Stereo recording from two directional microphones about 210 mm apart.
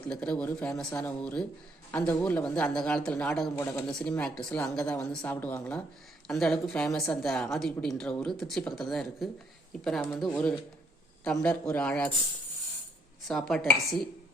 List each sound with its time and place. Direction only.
0.1 s a woman's voice: 5° left (ahead or behind)
13.2 s a woman's voice: centre (ahead or behind)